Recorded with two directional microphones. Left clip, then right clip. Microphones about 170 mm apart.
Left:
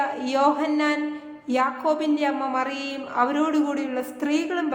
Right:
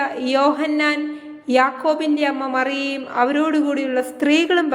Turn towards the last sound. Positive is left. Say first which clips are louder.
# right 8 dB
turn(degrees=-30)  # may be behind; listen again after turning